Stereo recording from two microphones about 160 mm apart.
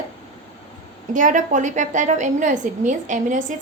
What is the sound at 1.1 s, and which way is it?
A woman's voice, 50° right (ahead or behind).